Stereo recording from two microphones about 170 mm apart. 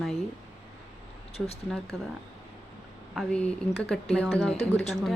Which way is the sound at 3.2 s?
5° left (ahead or behind).